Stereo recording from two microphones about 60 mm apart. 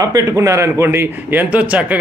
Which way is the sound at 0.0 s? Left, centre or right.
Right.